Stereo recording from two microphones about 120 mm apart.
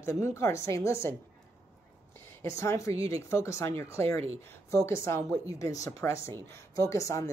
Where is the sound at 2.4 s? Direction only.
25° left (ahead or behind).